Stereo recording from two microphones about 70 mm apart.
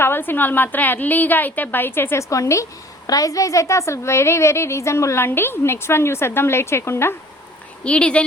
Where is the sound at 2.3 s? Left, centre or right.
Left.